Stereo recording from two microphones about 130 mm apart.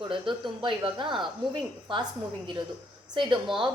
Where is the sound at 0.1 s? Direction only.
40° right (ahead or behind).